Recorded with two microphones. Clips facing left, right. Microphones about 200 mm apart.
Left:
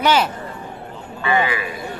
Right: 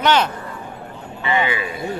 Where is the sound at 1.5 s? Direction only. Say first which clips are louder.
Right 1 dB; 25° right (ahead or behind).